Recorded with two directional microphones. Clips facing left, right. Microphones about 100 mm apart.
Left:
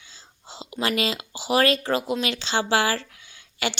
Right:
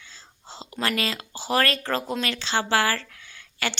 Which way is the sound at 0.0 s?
15° left (ahead or behind).